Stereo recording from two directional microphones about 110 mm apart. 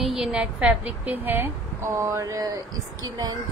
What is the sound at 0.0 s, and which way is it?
A woman's voice, 5° right (ahead or behind).